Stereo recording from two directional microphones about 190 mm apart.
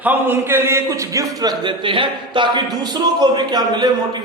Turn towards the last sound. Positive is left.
turn(degrees=-20)  # may be behind; listen again after turning